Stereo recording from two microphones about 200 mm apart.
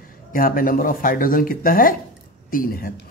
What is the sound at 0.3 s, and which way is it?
A woman's voice, 45° left (ahead or behind).